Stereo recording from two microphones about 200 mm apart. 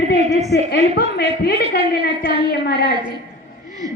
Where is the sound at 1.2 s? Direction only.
55° left (ahead or behind).